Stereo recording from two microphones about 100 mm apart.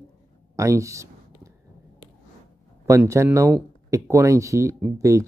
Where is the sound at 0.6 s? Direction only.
30° right (ahead or behind).